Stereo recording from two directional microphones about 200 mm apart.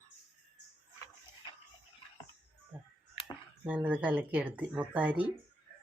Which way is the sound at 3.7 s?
5° right (ahead or behind).